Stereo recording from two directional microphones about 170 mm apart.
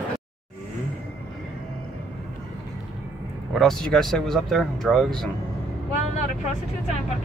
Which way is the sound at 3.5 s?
Centre (ahead or behind).